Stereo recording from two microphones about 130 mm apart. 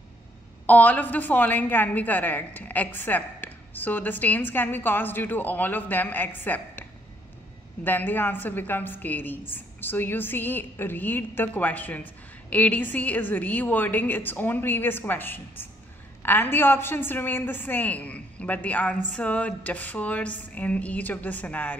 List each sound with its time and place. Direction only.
0.7 s a woman's voice: 10° left (ahead or behind)